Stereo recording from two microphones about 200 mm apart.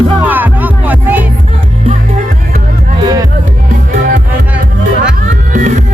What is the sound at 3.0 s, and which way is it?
Music, 20° right (ahead or behind).